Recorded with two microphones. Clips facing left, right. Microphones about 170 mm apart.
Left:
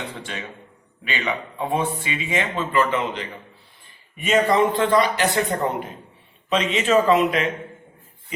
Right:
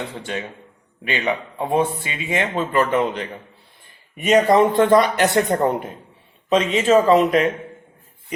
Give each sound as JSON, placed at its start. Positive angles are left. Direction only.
{"t": 1.0, "sound": "speech", "side_deg": -45}
{"t": 6.5, "sound": "a man's voice", "side_deg": -40}